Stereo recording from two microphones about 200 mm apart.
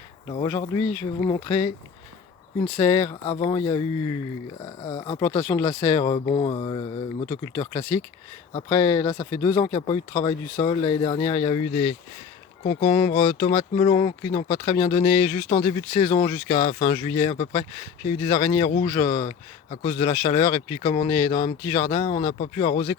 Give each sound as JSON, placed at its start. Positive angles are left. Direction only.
{"t": 0.6, "sound": "speech", "side_deg": 20}
{"t": 2.7, "sound": "speech", "side_deg": 25}
{"t": 5.4, "sound": "speech", "side_deg": 10}
{"t": 5.6, "sound": "speech", "side_deg": 25}
{"t": 8.7, "sound": "speech", "side_deg": 10}
{"t": 9.0, "sound": "speech", "side_deg": 25}
{"t": 13.1, "sound": "speech", "side_deg": 30}
{"t": 15.6, "sound": "speech", "side_deg": 30}